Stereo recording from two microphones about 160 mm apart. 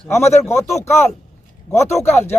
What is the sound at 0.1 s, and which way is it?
Speech, 15° left (ahead or behind).